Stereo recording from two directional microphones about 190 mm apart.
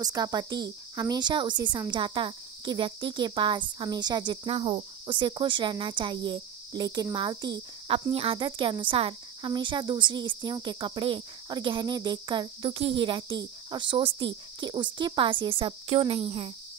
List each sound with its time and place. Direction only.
0.0 s speech: 20° right (ahead or behind)